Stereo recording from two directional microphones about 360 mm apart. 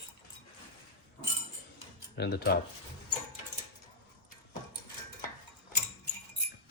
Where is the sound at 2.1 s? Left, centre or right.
Left.